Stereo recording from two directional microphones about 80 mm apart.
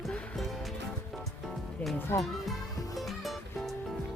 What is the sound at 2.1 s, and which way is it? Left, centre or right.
Speech, left.